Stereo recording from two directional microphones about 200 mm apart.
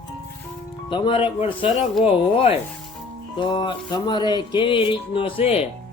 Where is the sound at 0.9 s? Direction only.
25° left (ahead or behind).